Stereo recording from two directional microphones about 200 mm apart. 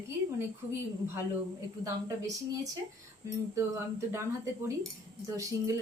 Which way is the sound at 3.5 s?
15° right (ahead or behind).